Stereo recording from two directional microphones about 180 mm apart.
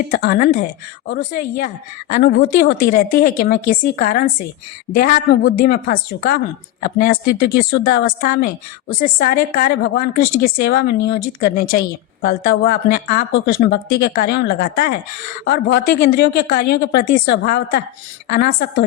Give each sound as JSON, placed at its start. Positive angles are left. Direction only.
{"t": 0.2, "sound": "speech", "side_deg": 55}
{"t": 2.9, "sound": "a woman's voice", "side_deg": 55}
{"t": 13.3, "sound": "speech", "side_deg": 65}